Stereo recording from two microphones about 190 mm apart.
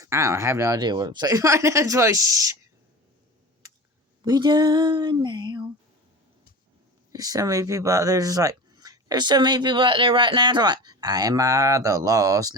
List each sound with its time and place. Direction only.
0.0 s speech: 15° right (ahead or behind)
4.2 s speech: 20° right (ahead or behind)
7.1 s speech: 20° right (ahead or behind)